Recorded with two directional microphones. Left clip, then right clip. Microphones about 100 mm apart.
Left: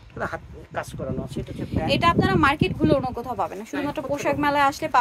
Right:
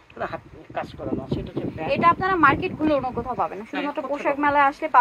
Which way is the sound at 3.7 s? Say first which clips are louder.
Left 1 dB; 25° left (ahead or behind).